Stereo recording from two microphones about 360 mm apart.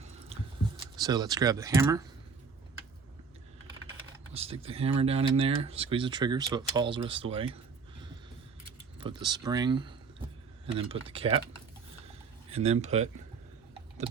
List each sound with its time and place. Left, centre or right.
0.0 s a sound: centre
1.0 s speech: centre
4.4 s speech: centre
12.5 s speech: centre